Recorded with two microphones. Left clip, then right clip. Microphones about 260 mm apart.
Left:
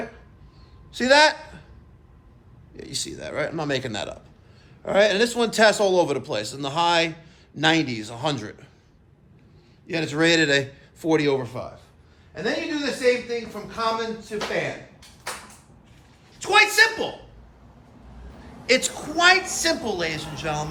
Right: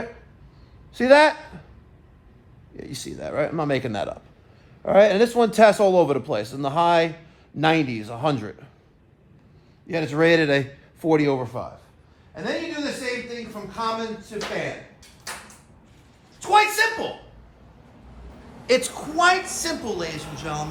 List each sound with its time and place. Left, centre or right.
0.9 s a man's voice: right
2.7 s speech: right
9.8 s speech: right
12.3 s a sound: centre
13.7 s a woman's voice: centre
16.4 s a woman's voice: centre
18.7 s a woman's voice: centre